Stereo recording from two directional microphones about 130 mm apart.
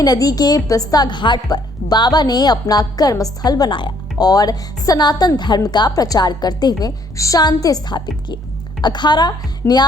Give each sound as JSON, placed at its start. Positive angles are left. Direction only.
{"t": 0.0, "sound": "a woman's voice", "side_deg": 30}